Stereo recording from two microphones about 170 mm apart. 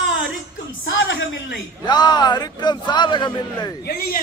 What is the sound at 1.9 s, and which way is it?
A man's voice, 25° left (ahead or behind).